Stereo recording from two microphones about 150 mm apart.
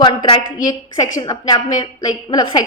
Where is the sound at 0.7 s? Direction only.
25° left (ahead or behind).